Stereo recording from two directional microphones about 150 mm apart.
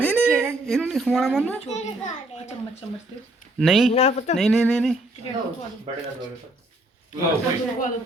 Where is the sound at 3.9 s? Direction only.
45° left (ahead or behind).